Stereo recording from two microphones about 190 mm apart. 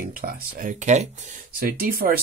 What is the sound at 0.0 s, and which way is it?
Speech, 50° right (ahead or behind).